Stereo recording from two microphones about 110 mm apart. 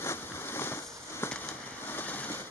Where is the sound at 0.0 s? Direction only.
25° left (ahead or behind).